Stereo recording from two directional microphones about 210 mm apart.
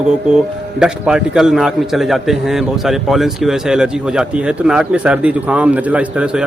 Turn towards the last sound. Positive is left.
turn(degrees=-5)  # may be behind; listen again after turning